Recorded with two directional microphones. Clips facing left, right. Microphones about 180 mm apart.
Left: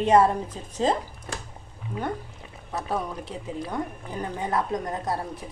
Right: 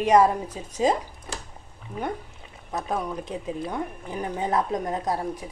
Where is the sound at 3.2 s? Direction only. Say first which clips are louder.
Right 2 dB; 20° right (ahead or behind).